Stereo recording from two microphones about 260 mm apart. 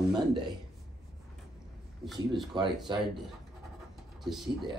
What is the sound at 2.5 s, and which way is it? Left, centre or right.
Speech, centre.